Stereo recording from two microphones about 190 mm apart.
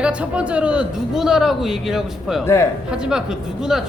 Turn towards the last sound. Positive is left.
turn(degrees=-5)  # may be behind; listen again after turning